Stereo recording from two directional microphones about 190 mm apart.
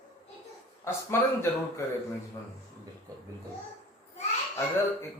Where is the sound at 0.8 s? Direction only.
15° left (ahead or behind).